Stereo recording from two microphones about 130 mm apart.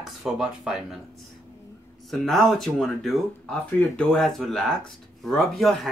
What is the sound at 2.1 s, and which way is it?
Speech, centre (ahead or behind).